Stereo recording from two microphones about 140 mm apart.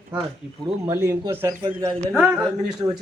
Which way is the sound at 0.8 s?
20° right (ahead or behind).